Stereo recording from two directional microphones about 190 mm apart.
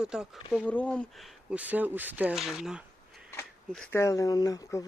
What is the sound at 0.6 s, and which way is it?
Speech, 5° left (ahead or behind).